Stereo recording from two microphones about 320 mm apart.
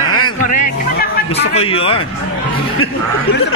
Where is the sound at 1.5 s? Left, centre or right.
Centre.